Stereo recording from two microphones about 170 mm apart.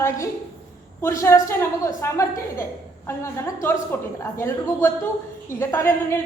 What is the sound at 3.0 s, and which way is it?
A woman's voice, 15° left (ahead or behind).